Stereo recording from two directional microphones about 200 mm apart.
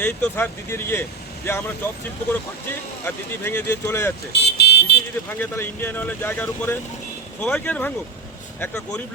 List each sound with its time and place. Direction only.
0.0 s speech: 10° left (ahead or behind)
3.4 s speech: 10° left (ahead or behind)
4.3 s vehicle: 55° left (ahead or behind)
5.4 s speech: 10° left (ahead or behind)